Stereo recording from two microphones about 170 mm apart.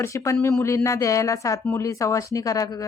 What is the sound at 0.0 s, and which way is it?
A woman's voice, 20° left (ahead or behind).